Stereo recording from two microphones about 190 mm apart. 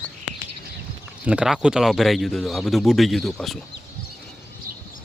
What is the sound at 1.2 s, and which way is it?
Speech, 5° right (ahead or behind).